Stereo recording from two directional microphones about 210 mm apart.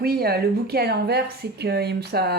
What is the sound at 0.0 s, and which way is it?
Speech, 45° right (ahead or behind).